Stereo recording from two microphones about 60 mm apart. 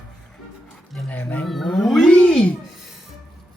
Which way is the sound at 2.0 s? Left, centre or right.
Left.